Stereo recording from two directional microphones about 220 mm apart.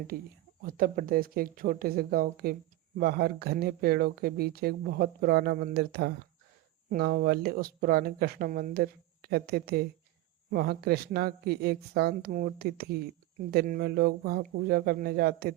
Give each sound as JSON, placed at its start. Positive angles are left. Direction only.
{"t": 0.6, "sound": "a woman's voice", "side_deg": -40}